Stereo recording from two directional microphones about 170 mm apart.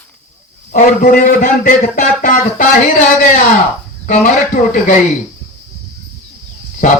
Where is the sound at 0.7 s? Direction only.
50° left (ahead or behind).